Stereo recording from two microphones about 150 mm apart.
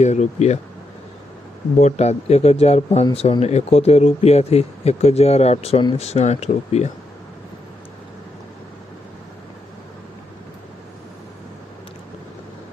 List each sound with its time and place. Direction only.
0.0 s speech: 50° left (ahead or behind)
1.8 s speech: 45° left (ahead or behind)